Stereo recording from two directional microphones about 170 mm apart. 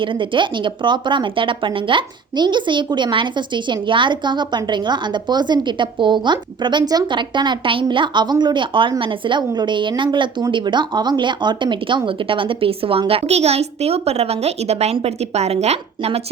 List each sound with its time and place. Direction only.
0.0 s speech: 30° right (ahead or behind)